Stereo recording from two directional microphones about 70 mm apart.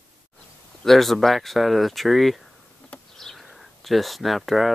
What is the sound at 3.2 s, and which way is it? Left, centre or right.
Bird, centre.